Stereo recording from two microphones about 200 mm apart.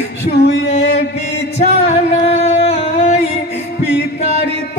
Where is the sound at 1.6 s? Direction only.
35° left (ahead or behind).